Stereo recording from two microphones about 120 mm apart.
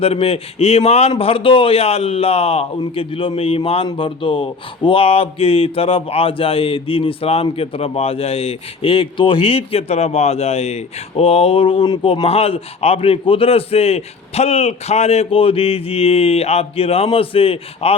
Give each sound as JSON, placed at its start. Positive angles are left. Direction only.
{"t": 0.0, "sound": "a man's voice", "side_deg": 55}
{"t": 1.1, "sound": "speech", "side_deg": 50}
{"t": 3.8, "sound": "speech", "side_deg": 45}